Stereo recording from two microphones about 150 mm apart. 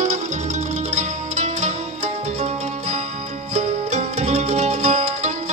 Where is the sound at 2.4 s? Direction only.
45° right (ahead or behind).